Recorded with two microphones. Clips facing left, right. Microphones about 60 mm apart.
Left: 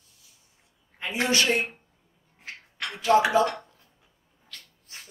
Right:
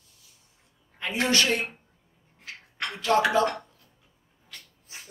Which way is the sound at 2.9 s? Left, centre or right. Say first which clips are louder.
Left 2 dB; centre.